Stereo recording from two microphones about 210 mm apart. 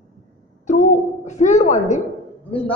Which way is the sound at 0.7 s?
35° left (ahead or behind).